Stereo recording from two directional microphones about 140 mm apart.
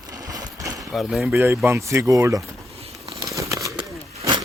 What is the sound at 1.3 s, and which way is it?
Speech, 20° right (ahead or behind).